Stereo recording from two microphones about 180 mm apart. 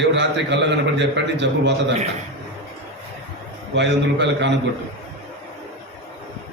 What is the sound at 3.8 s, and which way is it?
Speech, 75° right (ahead or behind).